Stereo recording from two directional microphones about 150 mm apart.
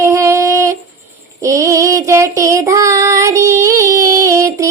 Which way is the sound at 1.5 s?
20° right (ahead or behind).